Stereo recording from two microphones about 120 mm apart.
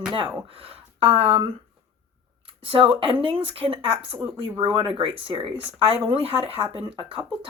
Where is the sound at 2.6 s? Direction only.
45° right (ahead or behind).